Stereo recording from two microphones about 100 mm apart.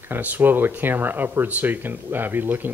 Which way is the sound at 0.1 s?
20° right (ahead or behind).